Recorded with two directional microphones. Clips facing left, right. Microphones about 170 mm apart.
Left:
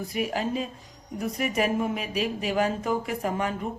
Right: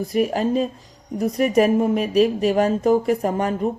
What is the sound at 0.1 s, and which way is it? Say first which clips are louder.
Speech: right 8 dB; 40° right (ahead or behind).